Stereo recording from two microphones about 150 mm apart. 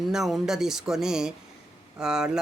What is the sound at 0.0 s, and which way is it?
Speech, centre (ahead or behind).